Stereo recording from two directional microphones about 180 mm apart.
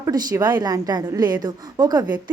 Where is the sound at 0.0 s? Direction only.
20° right (ahead or behind).